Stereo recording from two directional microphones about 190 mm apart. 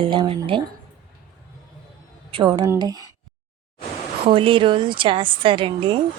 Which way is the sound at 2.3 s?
25° right (ahead or behind).